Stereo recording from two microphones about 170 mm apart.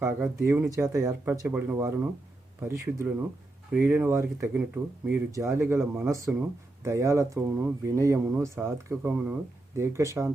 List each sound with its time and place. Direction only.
0.0 s speech: 15° right (ahead or behind)